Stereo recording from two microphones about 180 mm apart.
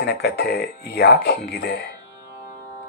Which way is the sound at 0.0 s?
65° left (ahead or behind).